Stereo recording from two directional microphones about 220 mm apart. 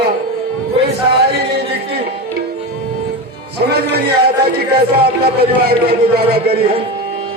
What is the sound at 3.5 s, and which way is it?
A man's voice, 45° right (ahead or behind).